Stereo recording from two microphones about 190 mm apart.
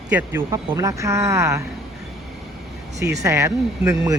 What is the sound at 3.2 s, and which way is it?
Speech, 15° right (ahead or behind).